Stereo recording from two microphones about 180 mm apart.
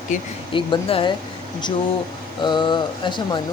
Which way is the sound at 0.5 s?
30° left (ahead or behind).